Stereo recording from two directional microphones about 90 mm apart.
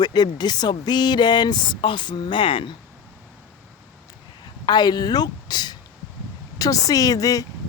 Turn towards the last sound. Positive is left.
turn(degrees=40)  # may be behind; listen again after turning